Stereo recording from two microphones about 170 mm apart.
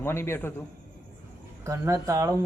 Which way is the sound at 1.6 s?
15° right (ahead or behind).